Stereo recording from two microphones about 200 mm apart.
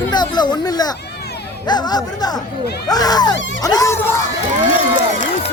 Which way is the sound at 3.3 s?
65° left (ahead or behind).